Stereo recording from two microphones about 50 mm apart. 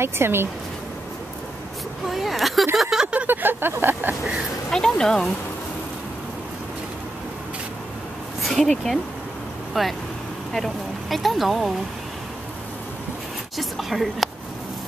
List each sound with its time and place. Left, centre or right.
0.0 s a sound: right
2.0 s speech: centre
2.7 s a sound: centre
3.3 s a sound: right
3.8 s speech: right
4.6 s speech: centre
8.4 s speech: centre
9.8 s speech: centre
13.6 s speech: centre